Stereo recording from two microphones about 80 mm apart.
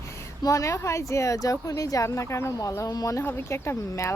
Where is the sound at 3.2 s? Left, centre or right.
Left.